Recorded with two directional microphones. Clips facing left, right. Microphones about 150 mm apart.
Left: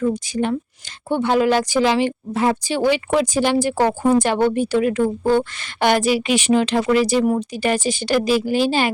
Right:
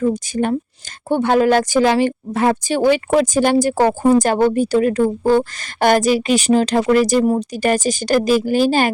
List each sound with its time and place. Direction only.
0.0 s a woman's voice: 45° right (ahead or behind)